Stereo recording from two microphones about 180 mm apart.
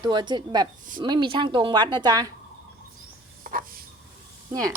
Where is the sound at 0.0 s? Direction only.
25° right (ahead or behind).